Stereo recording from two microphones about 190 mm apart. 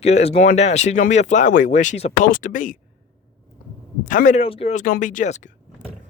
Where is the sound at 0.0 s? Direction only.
35° left (ahead or behind).